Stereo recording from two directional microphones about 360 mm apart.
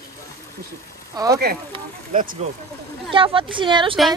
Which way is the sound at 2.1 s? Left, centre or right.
Right.